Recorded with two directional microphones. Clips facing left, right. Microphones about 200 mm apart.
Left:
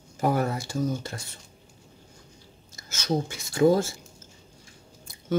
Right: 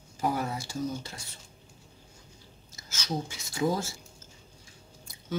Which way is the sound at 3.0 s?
55° left (ahead or behind).